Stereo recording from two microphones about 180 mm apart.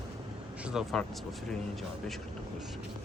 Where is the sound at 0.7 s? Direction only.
Centre (ahead or behind).